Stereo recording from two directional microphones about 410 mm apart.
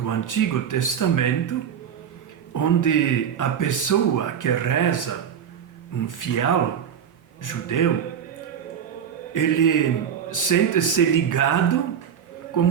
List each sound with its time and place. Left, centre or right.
0.0 s speech: left
9.3 s speech: left